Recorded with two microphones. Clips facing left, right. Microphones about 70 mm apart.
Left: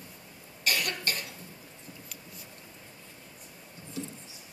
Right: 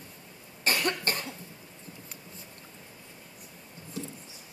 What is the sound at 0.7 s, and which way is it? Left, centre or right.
Cough, right.